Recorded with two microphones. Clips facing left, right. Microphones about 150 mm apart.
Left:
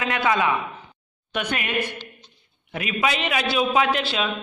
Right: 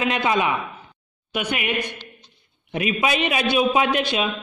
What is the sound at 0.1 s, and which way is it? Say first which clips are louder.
A man's voice: even; 20° right (ahead or behind).